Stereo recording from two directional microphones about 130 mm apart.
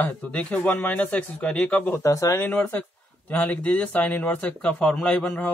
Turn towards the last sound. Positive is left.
turn(degrees=10)  # may be behind; listen again after turning